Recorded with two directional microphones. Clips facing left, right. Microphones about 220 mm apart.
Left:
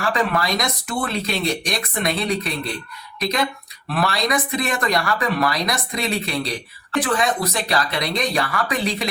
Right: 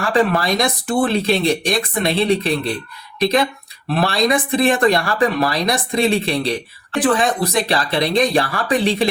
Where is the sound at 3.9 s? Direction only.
30° right (ahead or behind).